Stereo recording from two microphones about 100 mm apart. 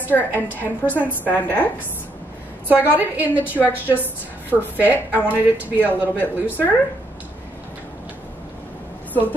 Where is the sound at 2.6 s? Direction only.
15° right (ahead or behind).